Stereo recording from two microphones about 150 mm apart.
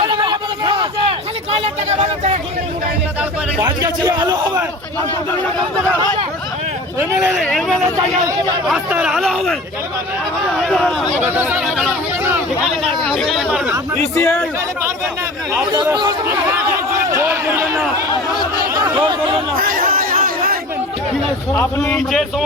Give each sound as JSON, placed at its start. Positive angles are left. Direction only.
{"t": 0.1, "sound": "a sound", "side_deg": -30}
{"t": 2.0, "sound": "speech", "side_deg": -50}
{"t": 3.2, "sound": "speech", "side_deg": -15}
{"t": 7.2, "sound": "speech", "side_deg": -5}
{"t": 8.9, "sound": "speech", "side_deg": -5}
{"t": 10.6, "sound": "speech", "side_deg": 0}
{"t": 11.2, "sound": "speech", "side_deg": -10}
{"t": 12.6, "sound": "speech", "side_deg": 0}
{"t": 14.2, "sound": "a man's voice", "side_deg": 10}
{"t": 17.1, "sound": "speech", "side_deg": -15}
{"t": 19.5, "sound": "chatter", "side_deg": -65}
{"t": 21.5, "sound": "a man's voice", "side_deg": 15}
{"t": 22.1, "sound": "speech", "side_deg": 0}